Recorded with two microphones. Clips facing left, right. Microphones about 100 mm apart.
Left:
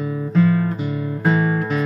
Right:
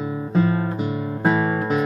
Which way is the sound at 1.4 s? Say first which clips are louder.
Even; 25° right (ahead or behind).